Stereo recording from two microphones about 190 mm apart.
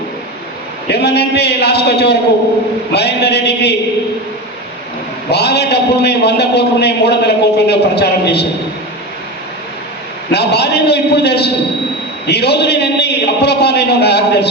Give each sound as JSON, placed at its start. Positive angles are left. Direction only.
{"t": 0.9, "sound": "a man's voice", "side_deg": 60}
{"t": 5.3, "sound": "a man's voice", "side_deg": 60}
{"t": 10.3, "sound": "a man's voice", "side_deg": 60}